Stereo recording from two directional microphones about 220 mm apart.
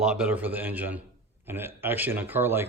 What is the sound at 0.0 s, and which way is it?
Speech, 5° right (ahead or behind).